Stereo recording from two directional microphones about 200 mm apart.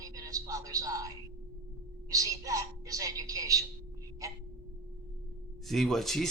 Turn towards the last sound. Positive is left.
turn(degrees=0)  # may be behind; listen again after turning